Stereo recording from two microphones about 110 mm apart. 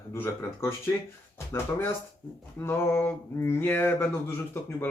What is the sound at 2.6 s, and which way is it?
Speech, 25° left (ahead or behind).